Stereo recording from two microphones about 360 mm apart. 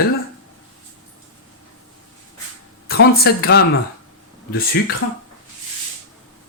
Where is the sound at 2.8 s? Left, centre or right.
Left.